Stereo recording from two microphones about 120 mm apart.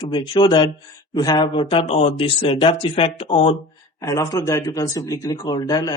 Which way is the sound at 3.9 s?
30° left (ahead or behind).